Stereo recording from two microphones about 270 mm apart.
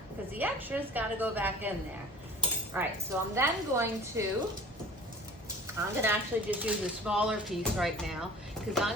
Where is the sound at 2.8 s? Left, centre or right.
Centre.